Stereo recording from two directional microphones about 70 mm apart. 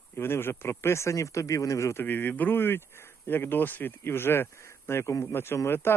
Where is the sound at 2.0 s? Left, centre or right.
Left.